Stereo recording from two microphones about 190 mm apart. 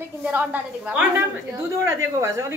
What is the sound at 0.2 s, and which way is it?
A woman's voice, 10° right (ahead or behind).